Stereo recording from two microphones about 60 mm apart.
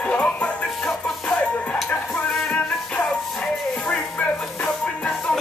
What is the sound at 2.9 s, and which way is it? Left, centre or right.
Music, centre.